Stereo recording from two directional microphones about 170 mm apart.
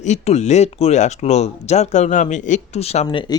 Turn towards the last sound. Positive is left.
turn(degrees=40)  # may be behind; listen again after turning